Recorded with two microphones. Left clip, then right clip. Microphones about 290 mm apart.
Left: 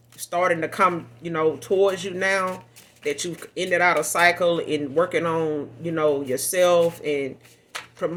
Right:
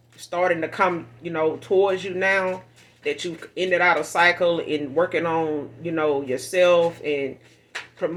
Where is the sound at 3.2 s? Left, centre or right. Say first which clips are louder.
Right 2 dB; left.